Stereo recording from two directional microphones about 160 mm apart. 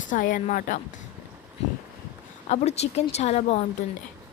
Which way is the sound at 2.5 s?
40° left (ahead or behind).